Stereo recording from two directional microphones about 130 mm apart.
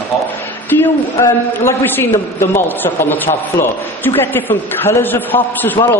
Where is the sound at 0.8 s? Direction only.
20° left (ahead or behind).